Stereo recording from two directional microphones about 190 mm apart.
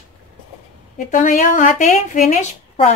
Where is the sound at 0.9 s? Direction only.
45° left (ahead or behind).